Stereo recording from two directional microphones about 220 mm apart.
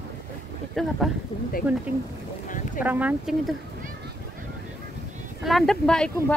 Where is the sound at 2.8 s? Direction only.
5° right (ahead or behind).